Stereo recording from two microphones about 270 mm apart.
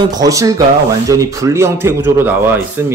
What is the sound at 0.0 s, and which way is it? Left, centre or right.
A man's voice, centre.